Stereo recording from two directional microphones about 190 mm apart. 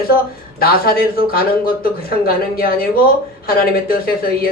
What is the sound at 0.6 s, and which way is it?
Speech, 50° left (ahead or behind).